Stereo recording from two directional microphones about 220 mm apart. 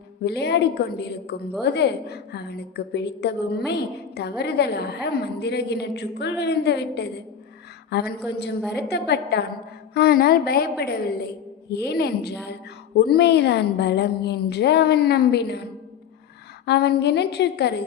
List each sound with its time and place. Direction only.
0.3 s a woman's voice: 50° left (ahead or behind)
16.6 s a woman's voice: 50° left (ahead or behind)